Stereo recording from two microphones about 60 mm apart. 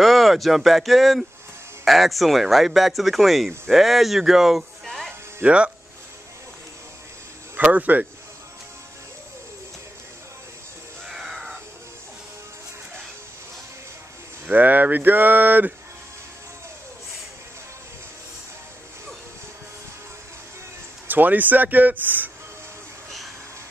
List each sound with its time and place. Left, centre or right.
0.0 s speech: centre
4.8 s music: centre
5.4 s speech: centre
7.5 s speech: right
11.1 s crow: centre
14.4 s speech: right
21.1 s speech: right